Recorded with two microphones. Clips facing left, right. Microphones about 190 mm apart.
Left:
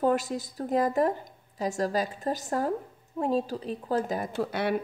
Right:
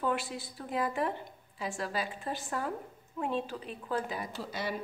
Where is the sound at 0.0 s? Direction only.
40° left (ahead or behind).